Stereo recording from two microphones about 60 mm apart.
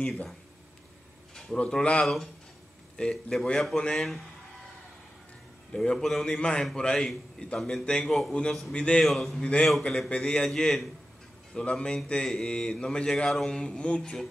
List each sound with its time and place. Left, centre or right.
1.3 s speech: centre
5.7 s speech: centre
8.7 s a man's voice: centre
9.0 s speech: centre
9.4 s speech: centre